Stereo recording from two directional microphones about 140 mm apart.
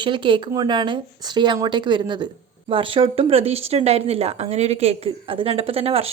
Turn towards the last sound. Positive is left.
turn(degrees=-45)  # may be behind; listen again after turning